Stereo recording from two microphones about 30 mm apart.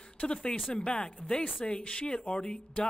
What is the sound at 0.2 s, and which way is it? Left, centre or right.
A woman's voice, left.